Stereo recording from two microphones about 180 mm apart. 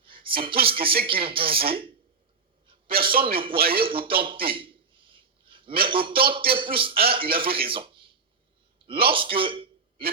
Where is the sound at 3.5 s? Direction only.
55° right (ahead or behind).